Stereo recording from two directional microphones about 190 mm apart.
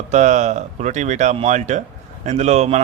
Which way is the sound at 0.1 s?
40° right (ahead or behind).